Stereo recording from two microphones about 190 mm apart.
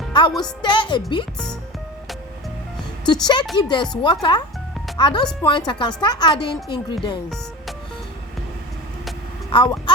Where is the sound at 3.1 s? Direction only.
25° left (ahead or behind).